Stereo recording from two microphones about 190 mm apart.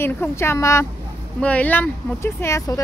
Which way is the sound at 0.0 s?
15° left (ahead or behind).